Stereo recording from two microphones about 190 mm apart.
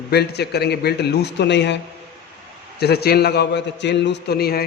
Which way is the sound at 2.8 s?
55° left (ahead or behind).